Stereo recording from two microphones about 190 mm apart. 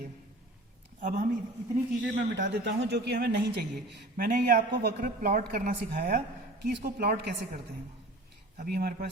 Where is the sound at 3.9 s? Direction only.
45° right (ahead or behind).